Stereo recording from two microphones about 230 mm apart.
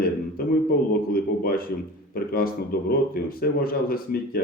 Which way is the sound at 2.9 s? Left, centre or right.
Left.